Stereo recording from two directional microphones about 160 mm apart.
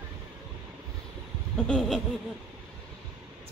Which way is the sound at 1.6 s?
Centre (ahead or behind).